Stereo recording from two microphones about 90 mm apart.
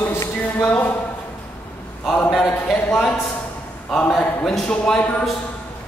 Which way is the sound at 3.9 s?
10° left (ahead or behind).